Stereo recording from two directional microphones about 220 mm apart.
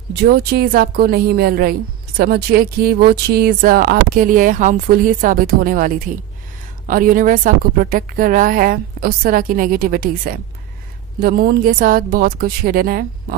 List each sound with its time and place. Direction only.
0.1 s a woman's voice: 45° right (ahead or behind)